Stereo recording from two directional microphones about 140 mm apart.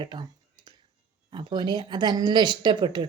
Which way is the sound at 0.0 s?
30° right (ahead or behind).